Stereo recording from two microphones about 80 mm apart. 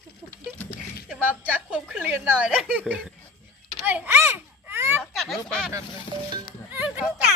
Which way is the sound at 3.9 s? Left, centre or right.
Right.